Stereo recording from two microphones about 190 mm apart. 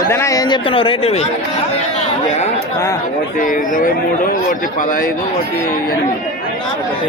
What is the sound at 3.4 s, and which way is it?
A man's voice, 45° left (ahead or behind).